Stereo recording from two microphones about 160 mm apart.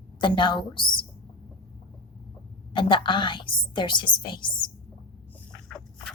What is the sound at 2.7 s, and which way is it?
A woman's voice, 30° left (ahead or behind).